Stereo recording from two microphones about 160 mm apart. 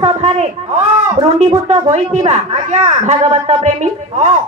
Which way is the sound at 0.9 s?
45° right (ahead or behind).